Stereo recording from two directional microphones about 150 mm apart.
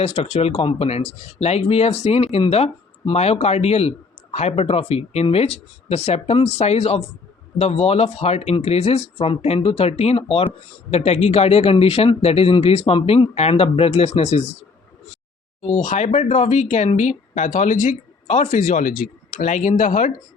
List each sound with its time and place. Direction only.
0.0 s speech: 45° left (ahead or behind)
15.6 s speech: 50° left (ahead or behind)